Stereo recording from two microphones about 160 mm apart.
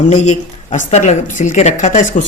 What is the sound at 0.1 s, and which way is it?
A woman's voice, 50° left (ahead or behind).